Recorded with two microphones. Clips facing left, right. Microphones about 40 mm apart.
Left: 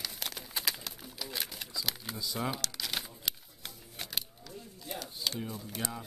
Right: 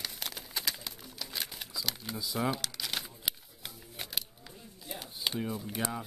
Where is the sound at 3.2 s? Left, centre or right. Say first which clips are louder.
Right 1 dB; centre.